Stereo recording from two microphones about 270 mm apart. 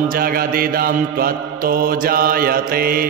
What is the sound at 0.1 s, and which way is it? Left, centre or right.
Mantra, right.